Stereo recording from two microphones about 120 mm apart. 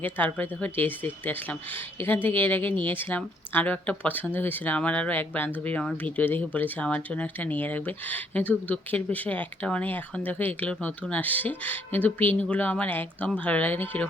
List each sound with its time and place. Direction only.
0.0 s speech: 15° left (ahead or behind)